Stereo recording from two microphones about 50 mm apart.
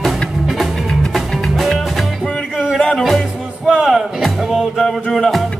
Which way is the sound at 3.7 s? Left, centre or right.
Centre.